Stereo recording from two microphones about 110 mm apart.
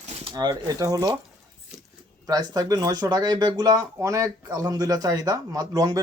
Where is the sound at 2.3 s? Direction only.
35° right (ahead or behind).